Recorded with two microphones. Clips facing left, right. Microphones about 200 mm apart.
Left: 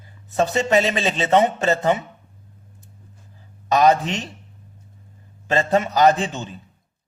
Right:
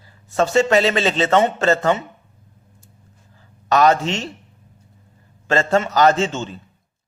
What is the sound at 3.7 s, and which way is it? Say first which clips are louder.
Speech: right 1 dB; 15° left (ahead or behind).